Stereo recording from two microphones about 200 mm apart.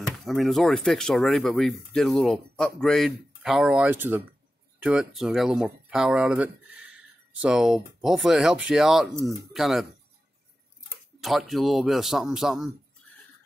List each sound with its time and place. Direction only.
0.0 s speech: centre (ahead or behind)
11.1 s speech: centre (ahead or behind)